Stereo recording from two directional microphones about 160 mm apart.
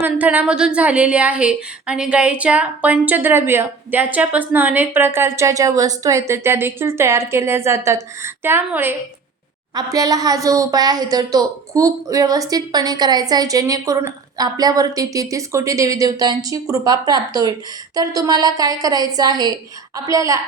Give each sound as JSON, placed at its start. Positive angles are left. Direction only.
{"t": 0.0, "sound": "a woman's voice", "side_deg": -10}